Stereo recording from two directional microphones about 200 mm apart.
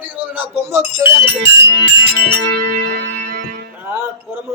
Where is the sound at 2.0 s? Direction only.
55° right (ahead or behind).